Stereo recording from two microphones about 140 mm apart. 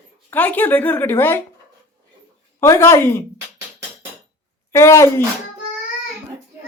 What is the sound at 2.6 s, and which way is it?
Speech, 20° left (ahead or behind).